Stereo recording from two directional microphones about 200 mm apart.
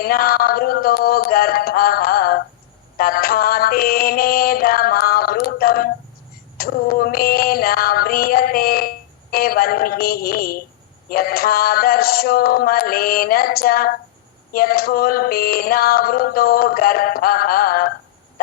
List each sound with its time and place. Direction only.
0.0 s music: 50° left (ahead or behind)
18.4 s fowl: 45° left (ahead or behind)